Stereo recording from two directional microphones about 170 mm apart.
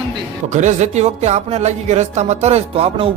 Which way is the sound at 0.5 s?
45° right (ahead or behind).